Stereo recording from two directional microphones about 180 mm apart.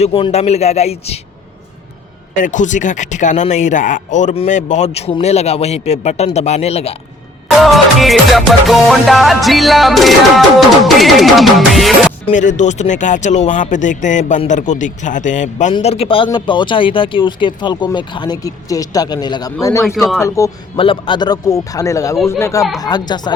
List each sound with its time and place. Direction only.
0.0 s speech: 35° left (ahead or behind)
2.3 s speech: 45° left (ahead or behind)
7.6 s music: centre (ahead or behind)
12.3 s speech: 45° left (ahead or behind); by 20.5 s 15° left (ahead or behind)
20.7 s speech: 30° left (ahead or behind)